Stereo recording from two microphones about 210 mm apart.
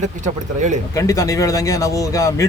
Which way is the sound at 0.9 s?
15° left (ahead or behind).